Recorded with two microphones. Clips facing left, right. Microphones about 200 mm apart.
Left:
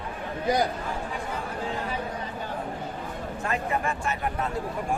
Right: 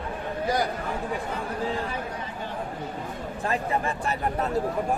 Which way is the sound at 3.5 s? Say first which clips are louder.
Right 1 dB; 35° right (ahead or behind).